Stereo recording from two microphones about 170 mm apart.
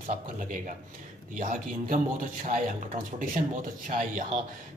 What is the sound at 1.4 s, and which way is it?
Speech, 55° right (ahead or behind).